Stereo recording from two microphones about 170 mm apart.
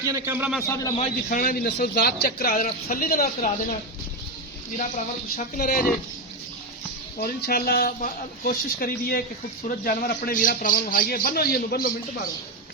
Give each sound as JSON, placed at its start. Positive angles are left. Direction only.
{"t": 0.0, "sound": "a man's voice", "side_deg": -15}
{"t": 1.3, "sound": "a man's voice", "side_deg": 55}
{"t": 1.6, "sound": "a man's voice", "side_deg": 70}
{"t": 4.8, "sound": "speech", "side_deg": 45}
{"t": 7.2, "sound": "a man's voice", "side_deg": 65}